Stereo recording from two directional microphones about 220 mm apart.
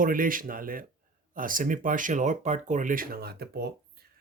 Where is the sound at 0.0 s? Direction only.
40° right (ahead or behind).